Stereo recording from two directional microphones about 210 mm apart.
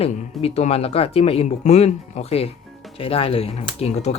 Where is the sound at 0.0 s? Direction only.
30° left (ahead or behind).